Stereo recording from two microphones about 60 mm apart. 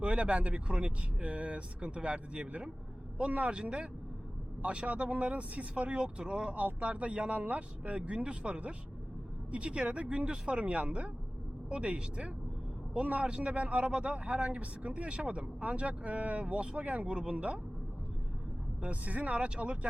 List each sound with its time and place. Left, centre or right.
0.0 s speech: right
18.8 s speech: right